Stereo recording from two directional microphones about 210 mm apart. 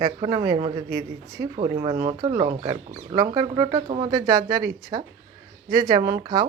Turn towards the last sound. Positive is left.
turn(degrees=-20)  # may be behind; listen again after turning